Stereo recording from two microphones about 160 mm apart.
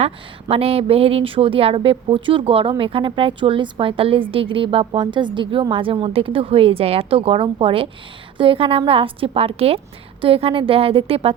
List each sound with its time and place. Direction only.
0.0 s speech: 40° right (ahead or behind)